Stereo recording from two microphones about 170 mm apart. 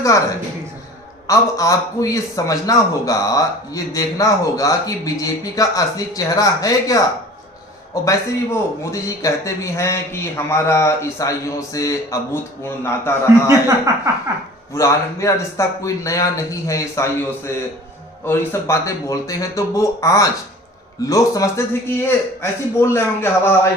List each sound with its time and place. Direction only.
1.3 s a man's voice: 20° left (ahead or behind)
8.8 s a man's voice: 20° left (ahead or behind)
13.5 s speech: 20° right (ahead or behind)
14.7 s a man's voice: 15° left (ahead or behind)